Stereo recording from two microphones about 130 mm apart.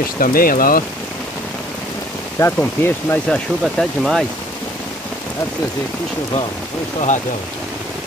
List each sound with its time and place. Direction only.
0.2 s speech: 90° left
2.3 s speech: 20° left (ahead or behind)
3.6 s speech: centre (ahead or behind)